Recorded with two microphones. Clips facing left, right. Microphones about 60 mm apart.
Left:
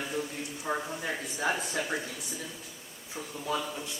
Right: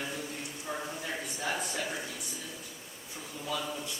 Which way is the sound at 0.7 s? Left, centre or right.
Left.